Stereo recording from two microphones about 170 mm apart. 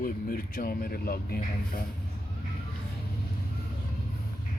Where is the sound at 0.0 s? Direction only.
60° left (ahead or behind).